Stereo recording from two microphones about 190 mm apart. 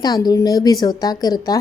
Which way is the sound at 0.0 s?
20° left (ahead or behind).